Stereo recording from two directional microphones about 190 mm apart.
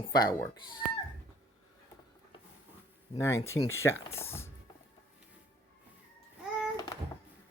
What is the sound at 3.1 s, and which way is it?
Speech, 15° left (ahead or behind).